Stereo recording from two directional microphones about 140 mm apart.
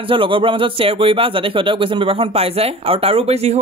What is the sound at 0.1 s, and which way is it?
Speech, 40° right (ahead or behind).